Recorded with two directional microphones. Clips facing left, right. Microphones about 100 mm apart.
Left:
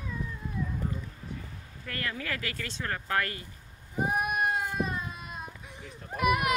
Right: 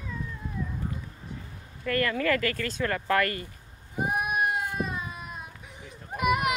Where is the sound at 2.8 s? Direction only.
90° right; by 3.5 s 65° right (ahead or behind).